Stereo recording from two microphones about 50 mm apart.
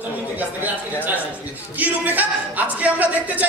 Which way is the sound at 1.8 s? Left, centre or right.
Right.